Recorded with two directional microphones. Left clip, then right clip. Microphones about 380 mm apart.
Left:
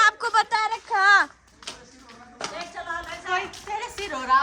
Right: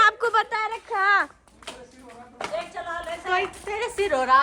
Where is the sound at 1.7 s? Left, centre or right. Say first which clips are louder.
Left 1 dB; centre.